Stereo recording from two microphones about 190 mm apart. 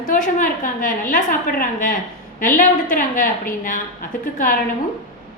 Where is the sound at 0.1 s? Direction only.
45° left (ahead or behind).